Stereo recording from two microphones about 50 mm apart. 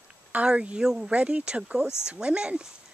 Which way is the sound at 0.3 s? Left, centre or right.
Right.